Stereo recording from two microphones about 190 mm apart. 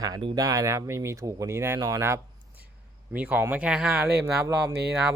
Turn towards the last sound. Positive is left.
turn(degrees=0)  # may be behind; listen again after turning